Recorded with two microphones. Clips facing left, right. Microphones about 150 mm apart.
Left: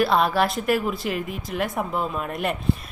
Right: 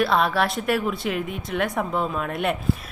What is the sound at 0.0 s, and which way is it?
A woman's voice, centre (ahead or behind).